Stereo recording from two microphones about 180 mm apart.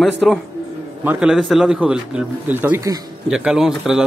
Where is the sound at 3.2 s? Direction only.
5° right (ahead or behind).